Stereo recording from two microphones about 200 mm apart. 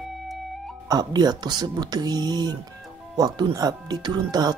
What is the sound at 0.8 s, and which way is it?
Speech, 20° right (ahead or behind).